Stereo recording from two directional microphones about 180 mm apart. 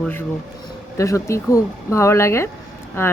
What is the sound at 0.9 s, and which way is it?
Speech, 15° left (ahead or behind).